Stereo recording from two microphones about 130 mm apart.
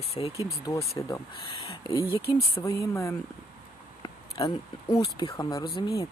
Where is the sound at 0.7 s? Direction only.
25° left (ahead or behind).